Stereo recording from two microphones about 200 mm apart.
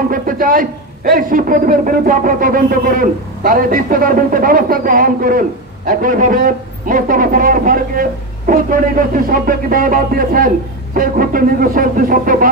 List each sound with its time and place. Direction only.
0.1 s speech: 45° right (ahead or behind)